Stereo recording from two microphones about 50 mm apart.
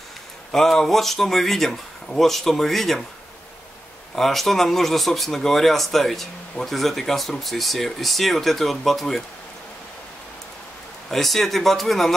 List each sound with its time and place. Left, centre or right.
0.5 s speech: centre
4.1 s speech: centre
11.1 s speech: centre